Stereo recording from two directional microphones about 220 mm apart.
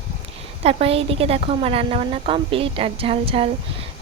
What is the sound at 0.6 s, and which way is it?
A woman's voice, 25° right (ahead or behind).